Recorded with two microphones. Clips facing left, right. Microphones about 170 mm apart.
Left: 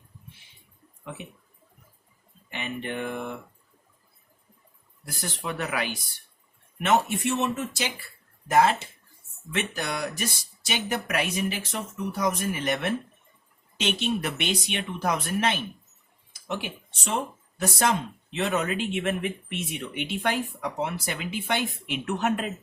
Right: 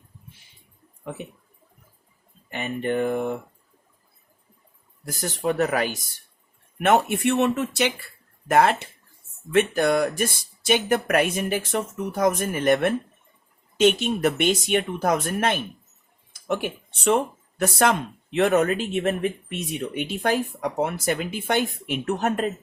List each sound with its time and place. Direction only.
2.5 s speech: 45° right (ahead or behind)
5.0 s speech: 45° right (ahead or behind)
6.7 s speech: 55° right (ahead or behind); by 22.5 s 40° right (ahead or behind)